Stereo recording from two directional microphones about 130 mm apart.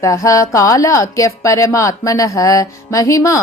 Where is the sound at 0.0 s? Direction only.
25° left (ahead or behind).